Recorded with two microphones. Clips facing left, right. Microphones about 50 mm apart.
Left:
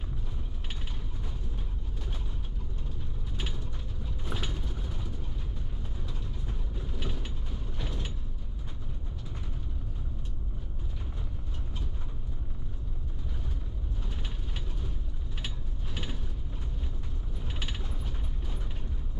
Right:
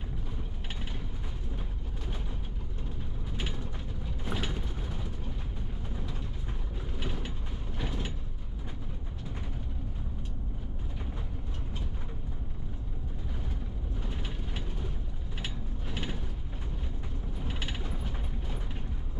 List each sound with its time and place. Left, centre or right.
3.3 s mechanisms: centre
6.8 s vehicle: centre
7.8 s mechanisms: centre
15.9 s mechanisms: centre
17.5 s mechanisms: centre